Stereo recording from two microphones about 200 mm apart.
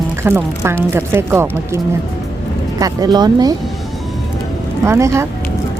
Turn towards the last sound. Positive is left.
turn(degrees=-15)  # may be behind; listen again after turning